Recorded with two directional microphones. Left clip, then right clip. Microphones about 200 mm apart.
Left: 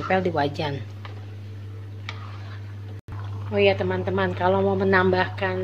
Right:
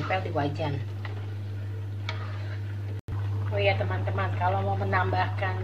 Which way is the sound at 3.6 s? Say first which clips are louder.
Left 6 dB; 40° left (ahead or behind).